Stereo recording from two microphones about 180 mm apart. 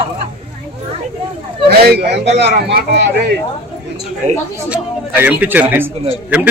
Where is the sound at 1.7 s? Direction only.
60° right (ahead or behind).